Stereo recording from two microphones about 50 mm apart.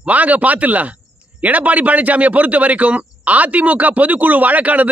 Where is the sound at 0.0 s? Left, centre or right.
Right.